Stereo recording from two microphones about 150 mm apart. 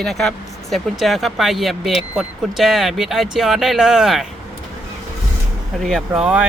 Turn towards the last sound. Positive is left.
turn(degrees=-5)  # may be behind; listen again after turning